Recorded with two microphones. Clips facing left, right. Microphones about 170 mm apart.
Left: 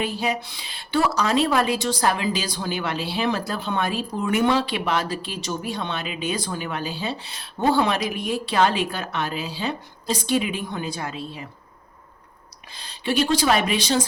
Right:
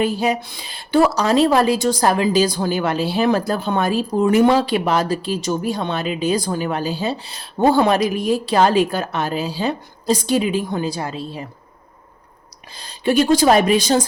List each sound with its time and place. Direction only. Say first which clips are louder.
0.0 s a woman's voice: right 6 dB; 45° right (ahead or behind)
12.8 s speech: right 6 dB; 45° right (ahead or behind)